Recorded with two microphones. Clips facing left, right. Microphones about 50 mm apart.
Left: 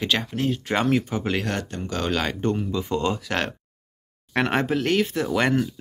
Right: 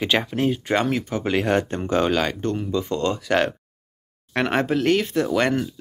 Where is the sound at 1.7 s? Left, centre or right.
Right.